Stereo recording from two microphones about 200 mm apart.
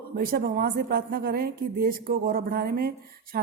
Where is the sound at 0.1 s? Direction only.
50° right (ahead or behind).